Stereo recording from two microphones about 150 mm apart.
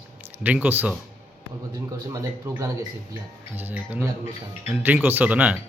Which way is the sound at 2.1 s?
20° right (ahead or behind).